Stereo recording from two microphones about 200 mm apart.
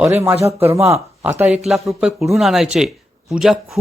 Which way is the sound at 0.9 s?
10° right (ahead or behind).